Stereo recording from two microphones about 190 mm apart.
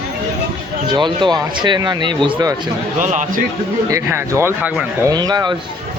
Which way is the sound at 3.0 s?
40° right (ahead or behind).